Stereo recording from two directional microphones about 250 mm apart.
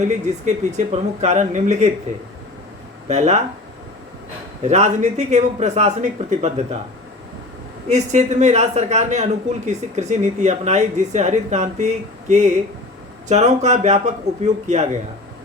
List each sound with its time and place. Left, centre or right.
0.1 s a woman's voice: right
3.1 s a woman's voice: right
4.6 s a woman's voice: right
7.9 s a woman's voice: right